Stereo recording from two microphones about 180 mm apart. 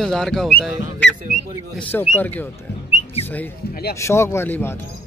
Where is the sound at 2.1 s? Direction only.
10° left (ahead or behind).